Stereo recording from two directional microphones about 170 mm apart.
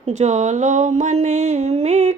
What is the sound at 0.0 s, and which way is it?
Speech, 40° right (ahead or behind).